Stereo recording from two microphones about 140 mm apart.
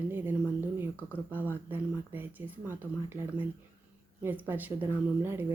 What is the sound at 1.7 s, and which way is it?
Speech, 15° right (ahead or behind).